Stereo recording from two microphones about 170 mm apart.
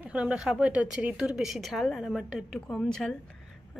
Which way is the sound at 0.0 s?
5° right (ahead or behind).